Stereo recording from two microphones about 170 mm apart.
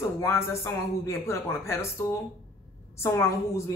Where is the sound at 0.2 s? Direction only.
15° left (ahead or behind).